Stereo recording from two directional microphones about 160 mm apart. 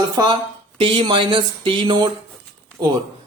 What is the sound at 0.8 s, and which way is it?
Speech, 30° right (ahead or behind).